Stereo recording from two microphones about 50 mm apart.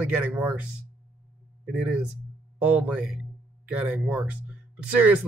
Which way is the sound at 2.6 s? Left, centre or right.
Right.